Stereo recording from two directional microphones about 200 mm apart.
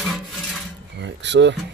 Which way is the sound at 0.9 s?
60° right (ahead or behind).